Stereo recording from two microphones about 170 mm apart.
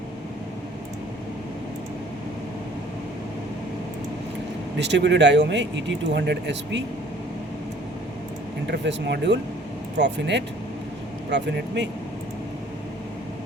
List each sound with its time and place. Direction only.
4.8 s speech: 90° right
8.6 s speech: 85° right